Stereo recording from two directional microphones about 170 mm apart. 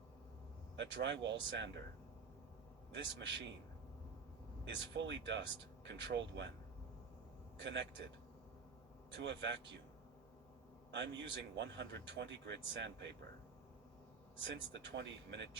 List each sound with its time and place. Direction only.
0.8 s speech: 90° right
2.9 s speech: 90° right
4.6 s speech: 90° right
7.6 s speech: 90° right
9.0 s speech: 90° right
10.9 s speech: 90° right
14.4 s speech: 90° right